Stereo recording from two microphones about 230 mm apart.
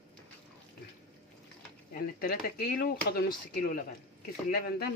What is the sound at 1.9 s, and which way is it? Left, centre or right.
Speech, left.